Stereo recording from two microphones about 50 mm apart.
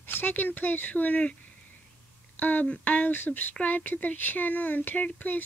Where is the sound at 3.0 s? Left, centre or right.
Left.